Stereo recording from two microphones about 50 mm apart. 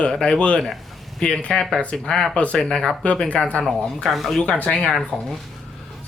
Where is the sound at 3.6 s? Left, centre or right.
Centre.